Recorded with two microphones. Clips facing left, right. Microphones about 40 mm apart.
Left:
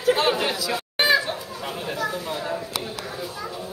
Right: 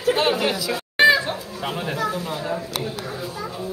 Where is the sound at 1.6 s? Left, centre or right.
Right.